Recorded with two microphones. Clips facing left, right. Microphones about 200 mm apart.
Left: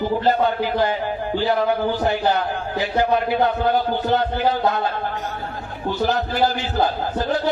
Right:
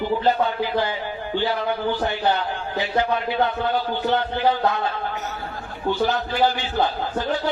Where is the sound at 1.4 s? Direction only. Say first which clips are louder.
Left 4 dB; 40° left (ahead or behind).